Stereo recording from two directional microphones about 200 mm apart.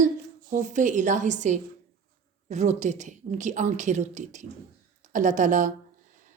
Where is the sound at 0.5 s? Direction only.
40° right (ahead or behind).